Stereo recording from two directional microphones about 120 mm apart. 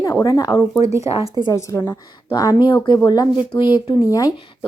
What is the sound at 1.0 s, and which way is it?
Speech, 55° left (ahead or behind).